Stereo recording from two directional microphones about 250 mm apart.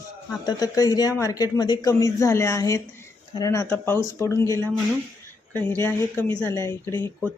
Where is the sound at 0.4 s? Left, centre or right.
Centre.